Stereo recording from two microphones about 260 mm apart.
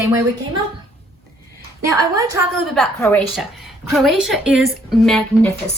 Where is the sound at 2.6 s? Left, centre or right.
Centre.